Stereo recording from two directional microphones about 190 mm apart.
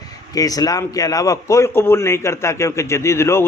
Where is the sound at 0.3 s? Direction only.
20° left (ahead or behind).